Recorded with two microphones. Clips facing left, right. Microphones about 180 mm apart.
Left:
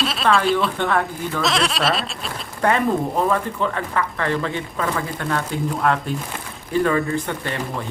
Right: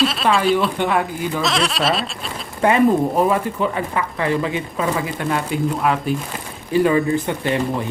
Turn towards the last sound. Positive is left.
turn(degrees=-15)  # may be behind; listen again after turning